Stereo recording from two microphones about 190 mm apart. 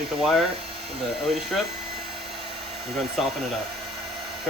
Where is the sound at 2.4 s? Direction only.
30° right (ahead or behind).